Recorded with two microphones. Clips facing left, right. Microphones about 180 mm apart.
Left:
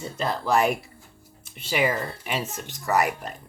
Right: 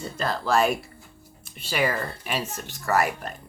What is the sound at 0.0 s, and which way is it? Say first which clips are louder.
Speech: even; 20° left (ahead or behind).